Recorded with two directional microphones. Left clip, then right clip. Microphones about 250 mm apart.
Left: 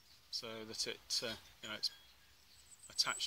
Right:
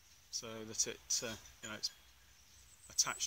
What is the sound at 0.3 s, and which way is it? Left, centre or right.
Speech, centre.